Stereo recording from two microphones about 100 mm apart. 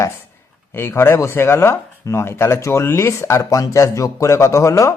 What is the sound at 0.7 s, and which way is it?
A man's voice, 25° left (ahead or behind).